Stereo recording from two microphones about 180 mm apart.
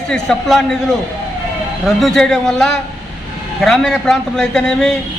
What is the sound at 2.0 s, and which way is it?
A man's voice, centre (ahead or behind).